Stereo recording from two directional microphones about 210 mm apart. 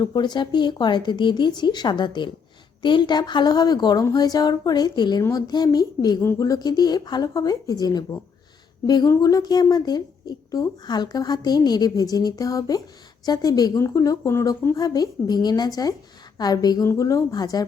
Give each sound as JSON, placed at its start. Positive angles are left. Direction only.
{"t": 0.0, "sound": "a woman's voice", "side_deg": 20}